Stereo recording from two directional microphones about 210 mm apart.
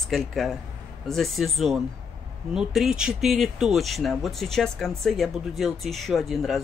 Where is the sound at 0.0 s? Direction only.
Centre (ahead or behind).